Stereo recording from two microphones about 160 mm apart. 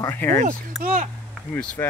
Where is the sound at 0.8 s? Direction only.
55° right (ahead or behind).